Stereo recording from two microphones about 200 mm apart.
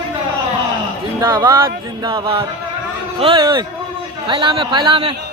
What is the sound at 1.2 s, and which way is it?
Speech, 20° right (ahead or behind).